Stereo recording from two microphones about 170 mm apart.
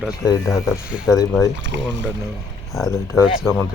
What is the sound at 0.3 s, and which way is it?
Speech, 20° left (ahead or behind).